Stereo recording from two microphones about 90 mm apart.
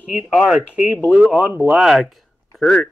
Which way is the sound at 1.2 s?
20° right (ahead or behind).